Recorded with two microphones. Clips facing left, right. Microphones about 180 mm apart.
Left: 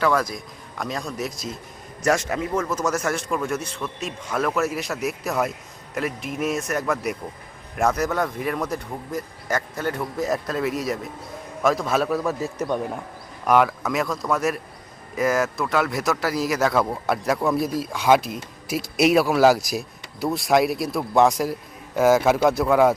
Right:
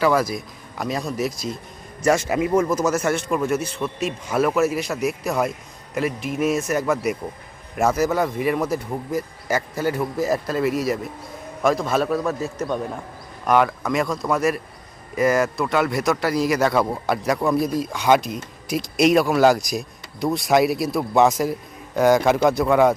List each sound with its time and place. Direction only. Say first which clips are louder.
0.0 s a man's voice: right 3 dB; 5° right (ahead or behind); by 12.8 s 15° left (ahead or behind)
13.5 s speech: even; 5° left (ahead or behind)